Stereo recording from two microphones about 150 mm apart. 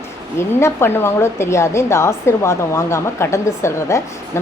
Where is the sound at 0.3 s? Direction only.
15° left (ahead or behind).